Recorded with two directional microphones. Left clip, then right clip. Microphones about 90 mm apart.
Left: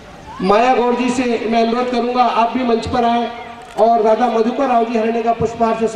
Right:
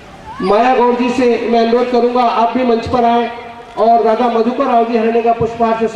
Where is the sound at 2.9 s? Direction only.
25° right (ahead or behind).